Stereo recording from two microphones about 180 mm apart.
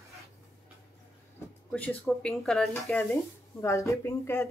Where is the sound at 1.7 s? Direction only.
10° left (ahead or behind).